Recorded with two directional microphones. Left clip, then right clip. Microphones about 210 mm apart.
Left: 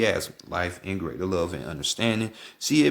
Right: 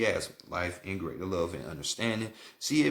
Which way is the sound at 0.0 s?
45° left (ahead or behind).